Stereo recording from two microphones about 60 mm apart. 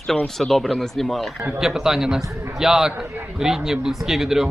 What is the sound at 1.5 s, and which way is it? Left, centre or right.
A man's voice, centre.